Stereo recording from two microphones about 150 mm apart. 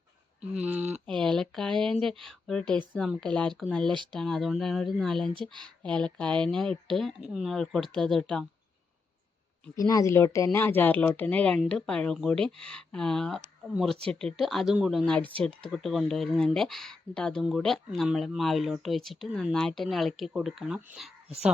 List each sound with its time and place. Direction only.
0.5 s speech: 5° right (ahead or behind)
0.8 s speech: 50° right (ahead or behind)
1.0 s speech: 5° left (ahead or behind)
5.3 s speech: 35° right (ahead or behind)
5.8 s speech: 5° left (ahead or behind)
9.7 s speech: 25° left (ahead or behind); by 15.3 s 5° left (ahead or behind)
15.3 s speech: 35° right (ahead or behind)
15.6 s speech: centre (ahead or behind)